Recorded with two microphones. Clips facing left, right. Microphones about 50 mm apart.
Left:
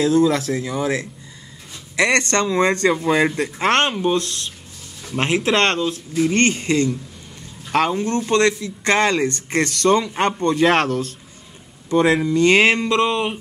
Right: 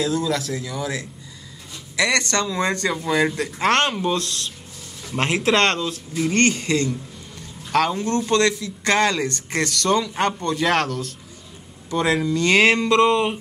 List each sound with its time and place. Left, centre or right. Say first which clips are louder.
0.0 s speech: left 6 dB; left
3.3 s speech: left 1 dB; centre
5.0 s speech: left 1 dB; centre
10.9 s speech: left 5 dB; left
11.9 s speech: left 4 dB; centre